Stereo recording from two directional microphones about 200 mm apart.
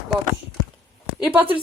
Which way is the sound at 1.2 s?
10° right (ahead or behind).